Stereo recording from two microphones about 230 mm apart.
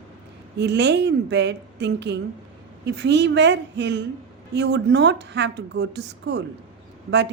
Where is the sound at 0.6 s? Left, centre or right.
Right.